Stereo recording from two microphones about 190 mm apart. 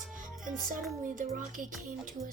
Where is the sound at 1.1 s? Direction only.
45° right (ahead or behind).